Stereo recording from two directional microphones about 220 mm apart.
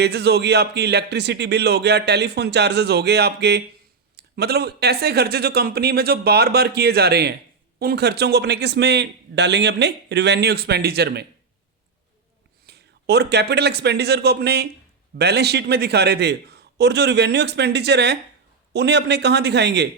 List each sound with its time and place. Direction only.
0.0 s speech: 50° right (ahead or behind)
12.6 s a man's voice: 50° right (ahead or behind)